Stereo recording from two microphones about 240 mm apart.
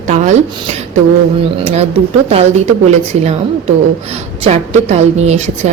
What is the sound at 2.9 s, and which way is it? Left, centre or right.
A woman's voice, right.